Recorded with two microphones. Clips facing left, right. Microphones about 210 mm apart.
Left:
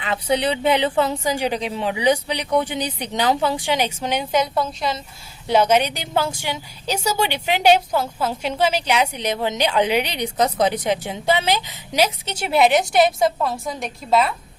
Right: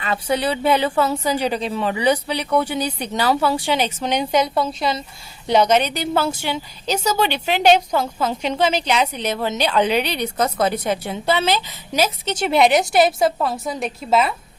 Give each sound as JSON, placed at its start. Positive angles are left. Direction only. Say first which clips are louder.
{"t": 0.1, "sound": "a woman's voice", "louder": "even", "side_deg": 20}